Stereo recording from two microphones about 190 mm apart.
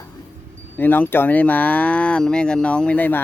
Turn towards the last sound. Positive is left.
turn(degrees=10)  # may be behind; listen again after turning